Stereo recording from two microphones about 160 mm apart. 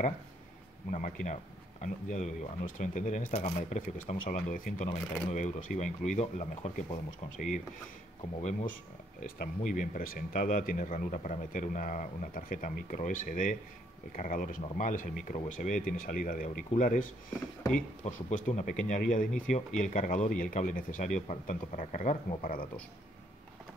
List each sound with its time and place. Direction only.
0.9 s speech: 50° left (ahead or behind)
3.3 s speech: 45° left (ahead or behind)
8.4 s speech: 50° left (ahead or behind)